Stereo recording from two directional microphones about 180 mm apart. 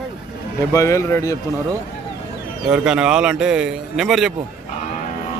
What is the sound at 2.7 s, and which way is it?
Speech, 5° right (ahead or behind).